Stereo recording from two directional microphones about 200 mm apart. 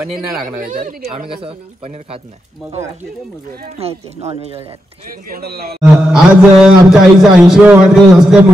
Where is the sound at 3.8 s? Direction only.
30° right (ahead or behind).